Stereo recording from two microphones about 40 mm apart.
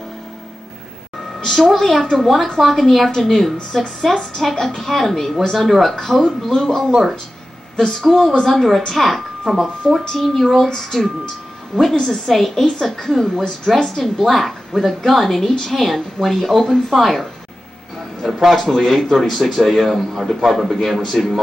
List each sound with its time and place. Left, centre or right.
1.4 s a woman's voice: centre
10.0 s a woman's voice: centre